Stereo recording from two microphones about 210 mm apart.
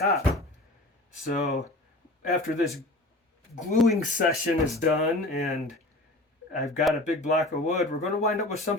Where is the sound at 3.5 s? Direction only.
30° left (ahead or behind).